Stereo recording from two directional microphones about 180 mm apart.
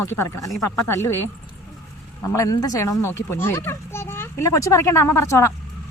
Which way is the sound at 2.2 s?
20° left (ahead or behind).